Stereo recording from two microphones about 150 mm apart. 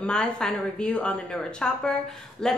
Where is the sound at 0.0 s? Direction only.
5° left (ahead or behind).